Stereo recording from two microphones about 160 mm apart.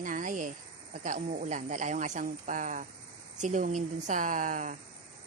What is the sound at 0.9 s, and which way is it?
Speech, 50° right (ahead or behind).